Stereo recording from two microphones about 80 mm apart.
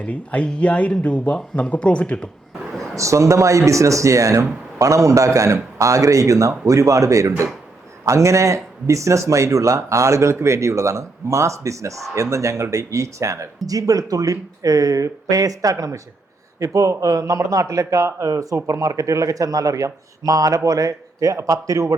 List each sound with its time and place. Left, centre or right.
0.0 s speech: centre
2.9 s a man's voice: right